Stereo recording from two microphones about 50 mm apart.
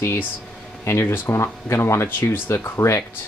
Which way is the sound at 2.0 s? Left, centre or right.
Left.